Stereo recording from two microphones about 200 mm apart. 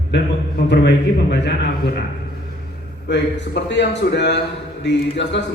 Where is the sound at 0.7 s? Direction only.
60° left (ahead or behind).